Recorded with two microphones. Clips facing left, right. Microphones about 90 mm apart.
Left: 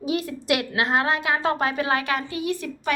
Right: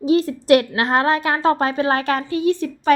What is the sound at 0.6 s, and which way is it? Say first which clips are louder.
A woman's voice: right 4 dB; 45° right (ahead or behind).